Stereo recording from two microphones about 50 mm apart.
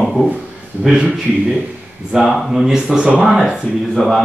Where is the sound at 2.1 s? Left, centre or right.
Centre.